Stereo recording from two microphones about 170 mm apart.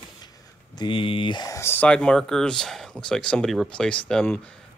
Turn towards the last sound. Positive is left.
turn(degrees=5)  # may be behind; listen again after turning